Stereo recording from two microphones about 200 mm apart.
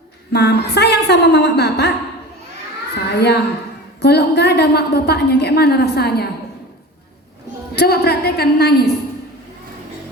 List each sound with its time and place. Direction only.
0.3 s a woman's voice: 55° left (ahead or behind)
3.1 s a woman's voice: 55° left (ahead or behind)
7.8 s a woman's voice: 50° left (ahead or behind)